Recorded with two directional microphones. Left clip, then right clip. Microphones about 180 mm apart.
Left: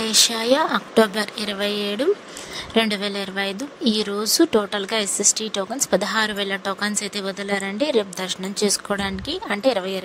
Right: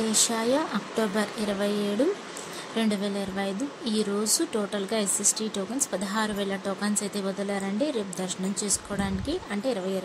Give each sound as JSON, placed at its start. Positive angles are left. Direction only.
{"t": 0.0, "sound": "speech", "side_deg": 50}